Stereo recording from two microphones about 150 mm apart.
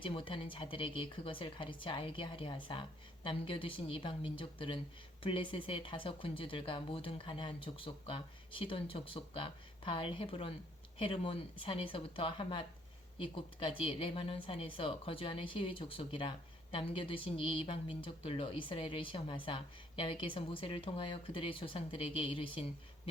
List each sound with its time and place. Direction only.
0.0 s speech: 35° left (ahead or behind)